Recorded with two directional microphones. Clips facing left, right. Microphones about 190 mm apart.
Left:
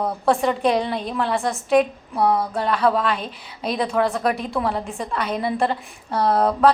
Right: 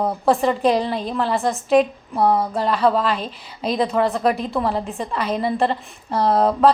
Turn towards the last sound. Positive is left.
turn(degrees=-5)  # may be behind; listen again after turning